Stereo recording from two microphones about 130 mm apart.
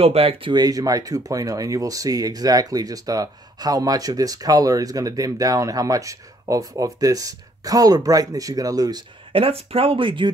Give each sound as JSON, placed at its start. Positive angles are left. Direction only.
{"t": 0.0, "sound": "speech", "side_deg": -45}
{"t": 9.3, "sound": "speech", "side_deg": -45}